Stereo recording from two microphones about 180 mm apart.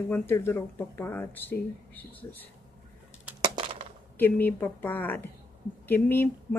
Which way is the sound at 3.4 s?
30° right (ahead or behind).